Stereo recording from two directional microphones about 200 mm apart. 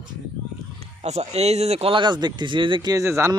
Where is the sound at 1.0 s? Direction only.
35° right (ahead or behind).